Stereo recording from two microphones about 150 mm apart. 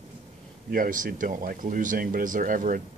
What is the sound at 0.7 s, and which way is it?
Speech, 65° right (ahead or behind).